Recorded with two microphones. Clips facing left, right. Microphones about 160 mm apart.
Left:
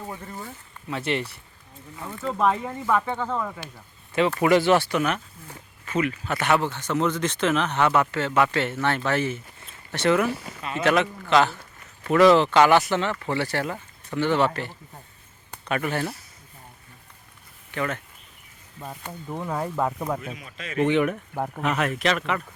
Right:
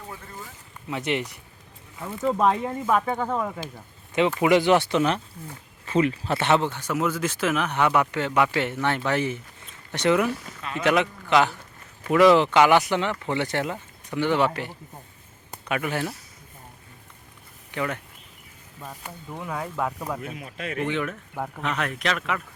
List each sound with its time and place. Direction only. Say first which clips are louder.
0.9 s a man's voice: even; 15° right (ahead or behind)
6.7 s a man's voice: left 1 dB; 10° right (ahead or behind)
10.2 s speech: left 1 dB; 5° left (ahead or behind)
10.8 s a man's voice: even; 15° right (ahead or behind)
17.7 s speech: even; 15° right (ahead or behind)
19.4 s speech: left 3 dB; 10° left (ahead or behind)
20.3 s speech: right 4 dB; 55° right (ahead or behind)
20.8 s speech: left 9 dB; 15° left (ahead or behind); by 22.4 s centre (ahead or behind)